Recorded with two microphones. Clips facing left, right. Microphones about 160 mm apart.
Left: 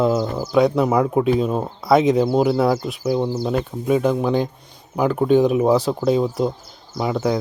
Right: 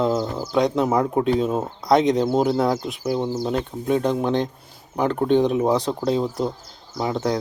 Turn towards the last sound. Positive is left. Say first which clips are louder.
# left 2 dB
turn(degrees=5)  # may be behind; listen again after turning